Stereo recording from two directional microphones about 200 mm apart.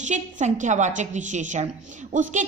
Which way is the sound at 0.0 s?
35° right (ahead or behind).